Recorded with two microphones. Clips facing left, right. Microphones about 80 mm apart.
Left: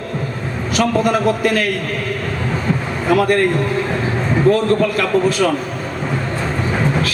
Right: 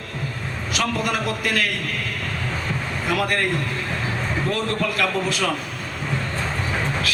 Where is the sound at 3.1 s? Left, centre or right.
Left.